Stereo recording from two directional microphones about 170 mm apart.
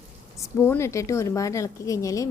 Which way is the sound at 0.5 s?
15° left (ahead or behind).